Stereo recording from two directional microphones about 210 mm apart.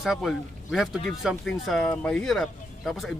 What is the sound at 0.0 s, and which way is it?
Speech, centre (ahead or behind).